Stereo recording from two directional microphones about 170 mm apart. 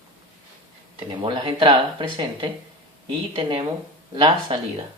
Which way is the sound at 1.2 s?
30° right (ahead or behind).